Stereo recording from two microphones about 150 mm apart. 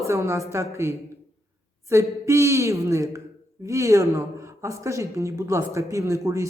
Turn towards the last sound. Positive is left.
turn(degrees=-20)  # may be behind; listen again after turning